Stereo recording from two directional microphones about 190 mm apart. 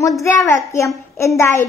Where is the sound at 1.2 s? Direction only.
15° left (ahead or behind).